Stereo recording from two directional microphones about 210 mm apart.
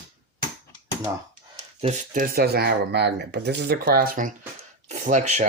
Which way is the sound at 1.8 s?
35° right (ahead or behind).